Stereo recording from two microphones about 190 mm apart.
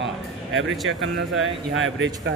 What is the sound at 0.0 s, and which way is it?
Music, 80° right.